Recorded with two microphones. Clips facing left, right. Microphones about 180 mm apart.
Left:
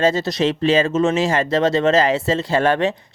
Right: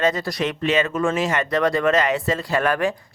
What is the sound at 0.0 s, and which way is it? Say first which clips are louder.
Speech: left 4 dB; 25° left (ahead or behind).